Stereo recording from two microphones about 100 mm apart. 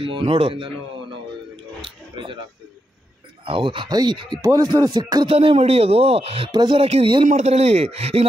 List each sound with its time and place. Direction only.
0.0 s speech: 65° right (ahead or behind)
1.8 s a sound: 60° right (ahead or behind)
3.4 s speech: 60° right (ahead or behind)
3.9 s speech: 45° right (ahead or behind)
4.4 s music: 30° right (ahead or behind)
5.3 s speech: 75° right (ahead or behind)
6.5 s speech: 50° right (ahead or behind)
6.8 s speech: 75° right (ahead or behind)